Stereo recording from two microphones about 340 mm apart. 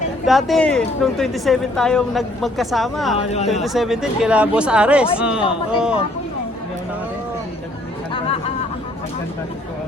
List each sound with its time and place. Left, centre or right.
0.3 s speech: centre
3.2 s speech: centre
3.5 s speech: centre
8.1 s chatter: centre